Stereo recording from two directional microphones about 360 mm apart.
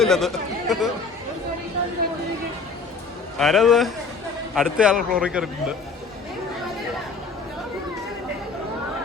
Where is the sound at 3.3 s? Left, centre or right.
Centre.